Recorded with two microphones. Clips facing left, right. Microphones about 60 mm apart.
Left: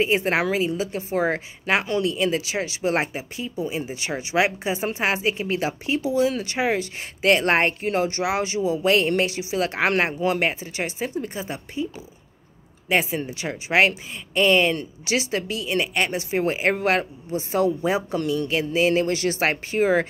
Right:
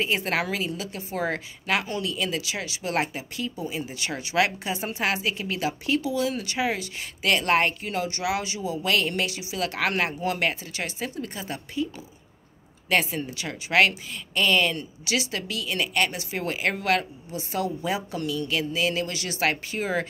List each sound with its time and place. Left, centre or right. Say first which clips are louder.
0.0 s speech: left 5 dB; left
13.2 s speech: left 3 dB; left